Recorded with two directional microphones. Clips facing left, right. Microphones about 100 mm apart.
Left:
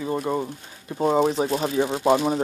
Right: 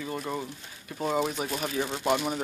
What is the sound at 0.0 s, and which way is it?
Speech, 25° left (ahead or behind).